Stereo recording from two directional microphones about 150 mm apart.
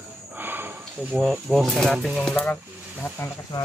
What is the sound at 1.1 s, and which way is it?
Speech, centre (ahead or behind).